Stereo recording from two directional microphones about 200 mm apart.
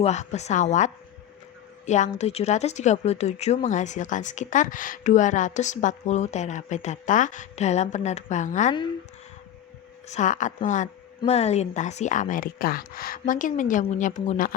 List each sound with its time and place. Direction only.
0.0 s speech: 35° left (ahead or behind)
1.9 s speech: 35° left (ahead or behind)
10.1 s speech: 35° left (ahead or behind)